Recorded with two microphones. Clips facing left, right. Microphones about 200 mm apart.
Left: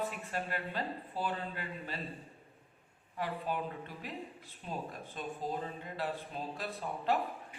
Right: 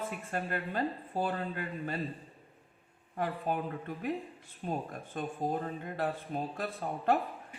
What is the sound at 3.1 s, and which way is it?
Speech, 50° right (ahead or behind).